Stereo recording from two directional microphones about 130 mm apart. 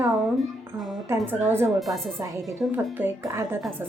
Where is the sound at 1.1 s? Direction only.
20° right (ahead or behind).